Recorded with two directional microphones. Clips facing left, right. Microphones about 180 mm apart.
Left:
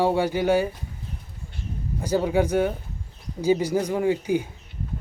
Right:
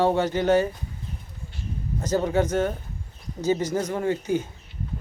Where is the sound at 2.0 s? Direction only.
10° left (ahead or behind).